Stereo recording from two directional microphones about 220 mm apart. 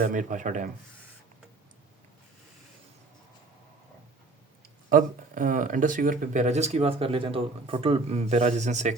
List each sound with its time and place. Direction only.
0.0 s speech: 35° right (ahead or behind)
4.9 s speech: 35° right (ahead or behind)